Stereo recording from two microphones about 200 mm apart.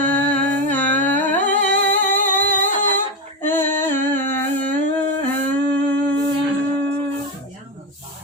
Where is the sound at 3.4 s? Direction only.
10° left (ahead or behind).